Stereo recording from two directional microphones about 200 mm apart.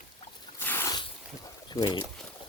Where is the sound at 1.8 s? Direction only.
20° left (ahead or behind).